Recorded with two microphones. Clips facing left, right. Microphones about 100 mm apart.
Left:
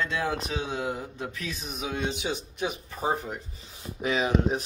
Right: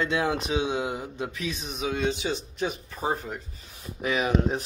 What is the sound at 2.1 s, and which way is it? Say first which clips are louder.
A man's voice: right 3 dB; 15° left (ahead or behind).